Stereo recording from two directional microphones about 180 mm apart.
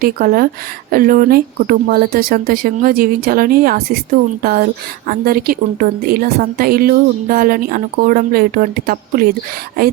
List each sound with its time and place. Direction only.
0.0 s speech: 55° right (ahead or behind)